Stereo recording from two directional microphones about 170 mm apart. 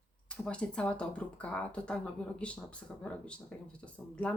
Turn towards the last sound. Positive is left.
turn(degrees=5)  # may be behind; listen again after turning